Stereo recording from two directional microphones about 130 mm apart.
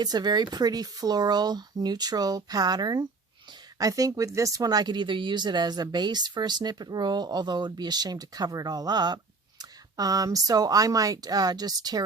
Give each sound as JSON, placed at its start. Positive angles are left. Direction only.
{"t": 0.0, "sound": "speech", "side_deg": -30}